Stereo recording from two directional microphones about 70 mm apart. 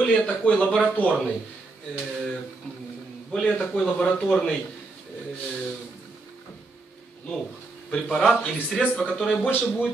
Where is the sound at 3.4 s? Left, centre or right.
Centre.